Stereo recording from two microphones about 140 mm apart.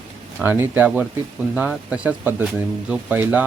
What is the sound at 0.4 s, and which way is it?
Speech, 15° right (ahead or behind).